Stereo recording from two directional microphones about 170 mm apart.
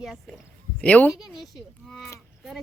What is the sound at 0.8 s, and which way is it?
Speech, 10° left (ahead or behind).